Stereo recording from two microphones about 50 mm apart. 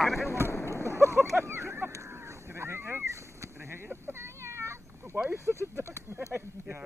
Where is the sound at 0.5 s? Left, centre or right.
Left.